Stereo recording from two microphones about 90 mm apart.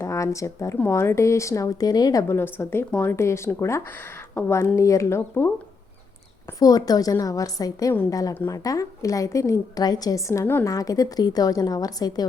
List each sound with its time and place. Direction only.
0.0 s a woman's voice: 35° left (ahead or behind)
2.2 s a woman's voice: 30° left (ahead or behind)
6.6 s a woman's voice: 45° left (ahead or behind)
10.4 s speech: 25° left (ahead or behind)
10.7 s a woman's voice: 40° left (ahead or behind)